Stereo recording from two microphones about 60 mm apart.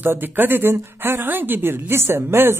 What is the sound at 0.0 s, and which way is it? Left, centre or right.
Speech, right.